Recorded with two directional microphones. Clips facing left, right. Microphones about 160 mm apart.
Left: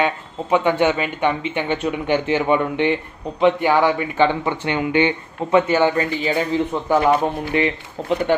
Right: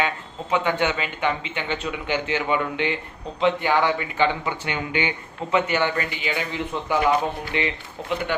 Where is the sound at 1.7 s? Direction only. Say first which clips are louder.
Left 6 dB; 50° left (ahead or behind).